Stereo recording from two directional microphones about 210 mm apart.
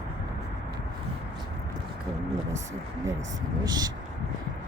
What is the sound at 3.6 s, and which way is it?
Speech, 20° right (ahead or behind).